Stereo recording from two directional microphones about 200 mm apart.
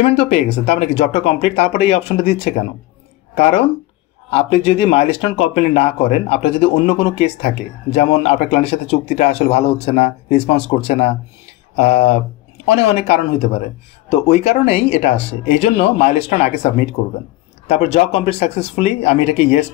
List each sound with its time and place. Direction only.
0.0 s speech: 30° left (ahead or behind)